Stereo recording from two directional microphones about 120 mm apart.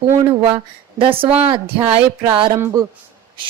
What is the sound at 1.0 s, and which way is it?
Music, 50° right (ahead or behind).